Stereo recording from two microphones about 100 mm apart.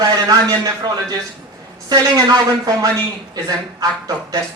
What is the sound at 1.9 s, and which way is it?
Speech, 40° right (ahead or behind).